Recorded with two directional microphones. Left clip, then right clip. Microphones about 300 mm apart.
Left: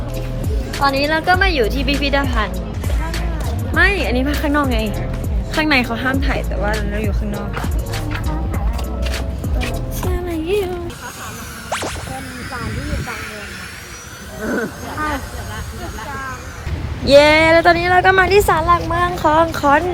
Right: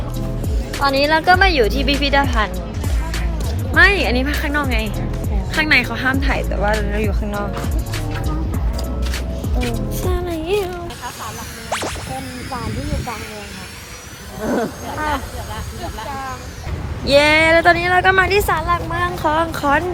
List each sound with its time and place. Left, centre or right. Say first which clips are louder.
0.7 s speech: right 1 dB; centre
3.8 s speech: right 3 dB; centre
4.4 s speech: left 3 dB; centre
6.0 s speech: right 1 dB; centre
10.1 s music: even; centre
11.7 s music: even; centre
14.4 s speech: right 1 dB; centre
14.8 s speech: right 1 dB; centre
17.1 s speech: left 3 dB; centre